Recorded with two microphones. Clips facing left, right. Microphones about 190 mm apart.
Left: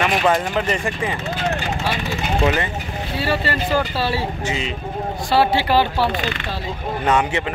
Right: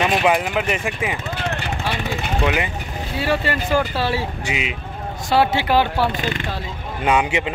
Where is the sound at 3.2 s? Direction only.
15° right (ahead or behind).